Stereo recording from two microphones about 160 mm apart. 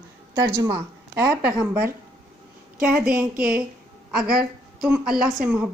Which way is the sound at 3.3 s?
65° right (ahead or behind).